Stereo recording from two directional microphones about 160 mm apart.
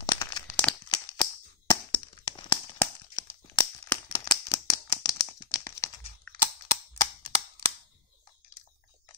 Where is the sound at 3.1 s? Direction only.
25° left (ahead or behind).